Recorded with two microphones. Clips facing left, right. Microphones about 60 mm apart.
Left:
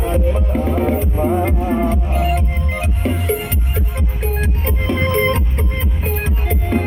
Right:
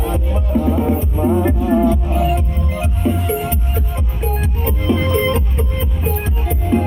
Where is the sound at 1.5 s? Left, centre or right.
Left.